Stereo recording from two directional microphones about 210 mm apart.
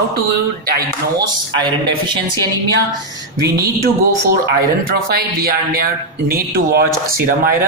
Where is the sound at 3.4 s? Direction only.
15° right (ahead or behind).